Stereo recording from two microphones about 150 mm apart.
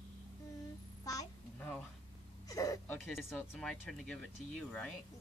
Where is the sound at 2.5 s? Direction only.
25° left (ahead or behind).